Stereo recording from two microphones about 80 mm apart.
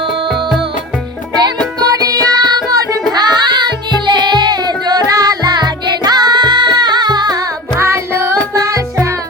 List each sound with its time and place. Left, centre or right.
0.3 s music: centre
1.4 s music: right
3.1 s music: right
7.8 s music: right